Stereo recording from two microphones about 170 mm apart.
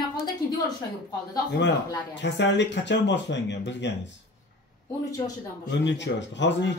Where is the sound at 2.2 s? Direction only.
90° left.